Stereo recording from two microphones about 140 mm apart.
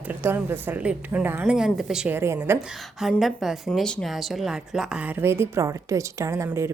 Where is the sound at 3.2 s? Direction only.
Centre (ahead or behind).